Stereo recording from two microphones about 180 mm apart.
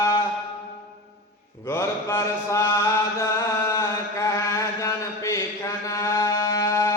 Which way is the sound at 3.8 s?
15° left (ahead or behind).